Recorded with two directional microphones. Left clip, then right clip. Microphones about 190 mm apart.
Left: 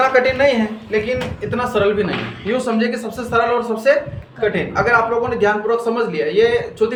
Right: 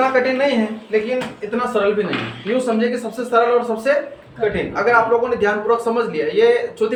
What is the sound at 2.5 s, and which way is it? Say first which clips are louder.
A man's voice: right 1 dB; 30° left (ahead or behind).